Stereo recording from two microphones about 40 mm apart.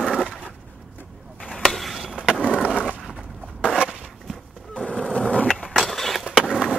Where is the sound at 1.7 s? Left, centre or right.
Centre.